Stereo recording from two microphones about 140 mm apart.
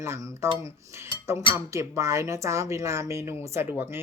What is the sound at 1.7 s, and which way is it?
A woman's voice, 20° right (ahead or behind).